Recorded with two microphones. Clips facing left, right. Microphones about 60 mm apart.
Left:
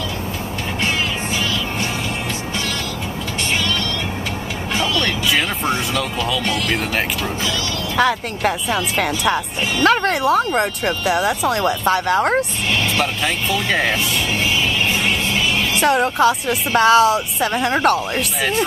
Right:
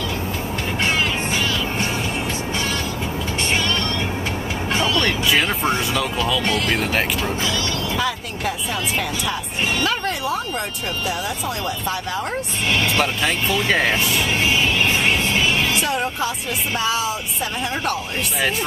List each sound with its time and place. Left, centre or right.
5.0 s music: centre
5.9 s speech: centre
8.0 s speech: left
12.8 s speech: centre
15.8 s speech: left